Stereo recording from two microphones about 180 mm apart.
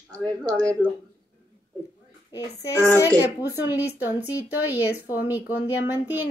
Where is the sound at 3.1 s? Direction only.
10° right (ahead or behind).